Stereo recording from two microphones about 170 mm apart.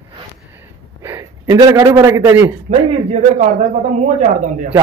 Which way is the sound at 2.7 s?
40° right (ahead or behind).